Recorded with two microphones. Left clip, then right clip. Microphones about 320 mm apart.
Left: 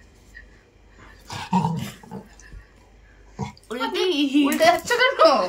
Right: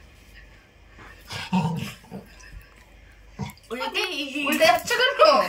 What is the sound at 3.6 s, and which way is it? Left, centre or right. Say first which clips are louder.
A woman's voice: left 3 dB; left.